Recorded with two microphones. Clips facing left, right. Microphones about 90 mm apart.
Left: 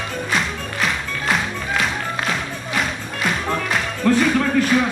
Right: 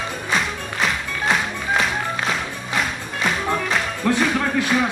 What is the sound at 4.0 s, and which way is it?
Music, 10° right (ahead or behind).